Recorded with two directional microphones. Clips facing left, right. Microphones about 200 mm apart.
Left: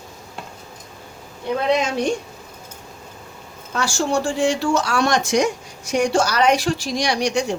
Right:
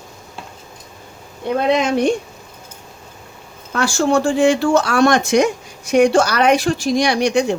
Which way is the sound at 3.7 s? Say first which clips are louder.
Right 5 dB; 60° right (ahead or behind).